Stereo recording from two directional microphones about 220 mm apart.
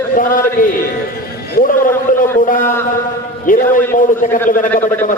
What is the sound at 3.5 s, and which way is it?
Speech, 40° left (ahead or behind).